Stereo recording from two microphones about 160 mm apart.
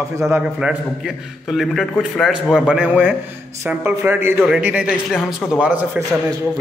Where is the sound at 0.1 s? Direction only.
15° right (ahead or behind).